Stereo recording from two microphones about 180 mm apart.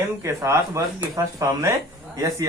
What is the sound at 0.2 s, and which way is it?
Speech, 15° right (ahead or behind).